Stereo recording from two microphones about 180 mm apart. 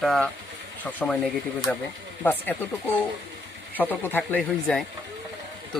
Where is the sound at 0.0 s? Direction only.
Centre (ahead or behind).